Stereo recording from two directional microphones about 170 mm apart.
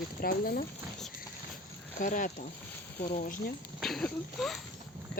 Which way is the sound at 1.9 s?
50° left (ahead or behind).